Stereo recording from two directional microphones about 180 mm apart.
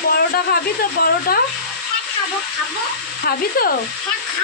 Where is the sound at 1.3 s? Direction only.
55° left (ahead or behind).